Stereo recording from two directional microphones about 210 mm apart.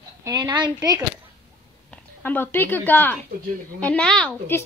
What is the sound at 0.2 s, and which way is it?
Speech, 20° right (ahead or behind).